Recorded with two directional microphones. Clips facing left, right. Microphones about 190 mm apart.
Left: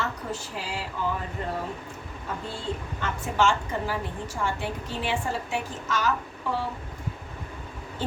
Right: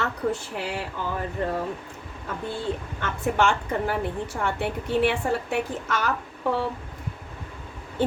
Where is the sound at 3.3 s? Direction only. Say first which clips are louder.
Even; 60° right (ahead or behind).